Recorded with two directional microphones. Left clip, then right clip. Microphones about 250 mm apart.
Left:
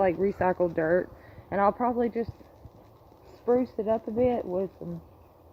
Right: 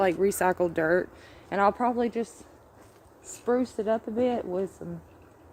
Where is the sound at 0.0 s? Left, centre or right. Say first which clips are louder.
Right 1 dB; right.